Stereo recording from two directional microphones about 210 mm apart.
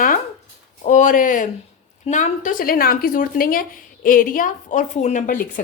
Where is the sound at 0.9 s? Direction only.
35° left (ahead or behind).